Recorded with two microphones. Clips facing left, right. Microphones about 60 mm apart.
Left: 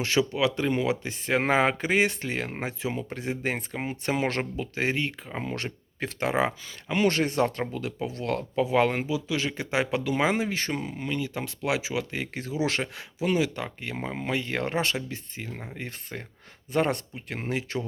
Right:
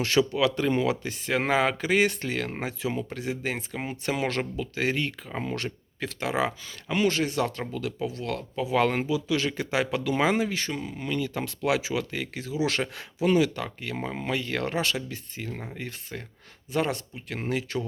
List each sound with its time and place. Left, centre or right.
0.0 s speech: centre
5.3 s speech: centre
5.5 s speech: left
8.7 s speech: centre
10.6 s speech: left
10.9 s speech: centre
12.1 s speech: left
12.4 s speech: left
12.8 s speech: centre
14.3 s speech: left
15.4 s speech: centre
16.1 s speech: left
16.7 s speech: left
17.5 s speech: left